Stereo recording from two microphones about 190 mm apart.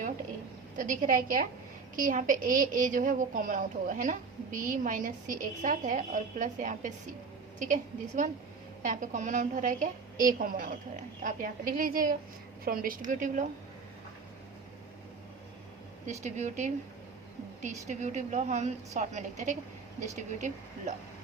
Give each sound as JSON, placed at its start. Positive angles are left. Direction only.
{"t": 0.8, "sound": "a woman's voice", "side_deg": -45}
{"t": 16.0, "sound": "a woman's voice", "side_deg": -40}